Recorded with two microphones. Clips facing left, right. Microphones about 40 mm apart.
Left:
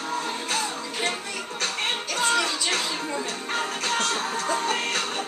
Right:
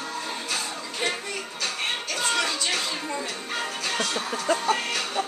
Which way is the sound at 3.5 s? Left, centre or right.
Left.